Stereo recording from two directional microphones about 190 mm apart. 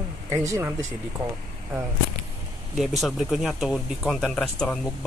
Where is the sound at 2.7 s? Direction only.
Centre (ahead or behind).